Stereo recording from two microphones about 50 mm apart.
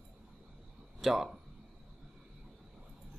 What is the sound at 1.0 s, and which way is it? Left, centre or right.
Speech, centre.